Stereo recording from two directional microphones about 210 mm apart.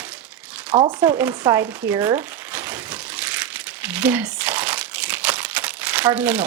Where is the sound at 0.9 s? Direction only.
5° right (ahead or behind).